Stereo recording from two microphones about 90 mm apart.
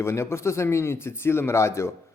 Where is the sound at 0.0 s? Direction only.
30° left (ahead or behind).